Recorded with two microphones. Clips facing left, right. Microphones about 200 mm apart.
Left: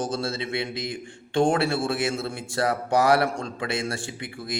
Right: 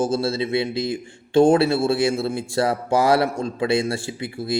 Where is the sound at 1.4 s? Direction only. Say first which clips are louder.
Right 6 dB; 20° right (ahead or behind).